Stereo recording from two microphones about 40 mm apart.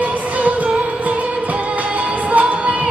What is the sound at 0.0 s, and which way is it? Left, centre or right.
Music, right.